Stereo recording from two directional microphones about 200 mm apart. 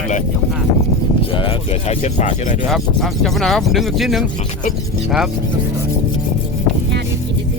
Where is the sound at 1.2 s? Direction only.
25° left (ahead or behind).